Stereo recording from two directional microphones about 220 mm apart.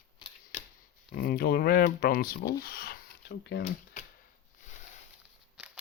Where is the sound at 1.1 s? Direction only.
45° left (ahead or behind).